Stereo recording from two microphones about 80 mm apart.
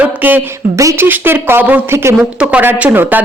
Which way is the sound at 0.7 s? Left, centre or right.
Right.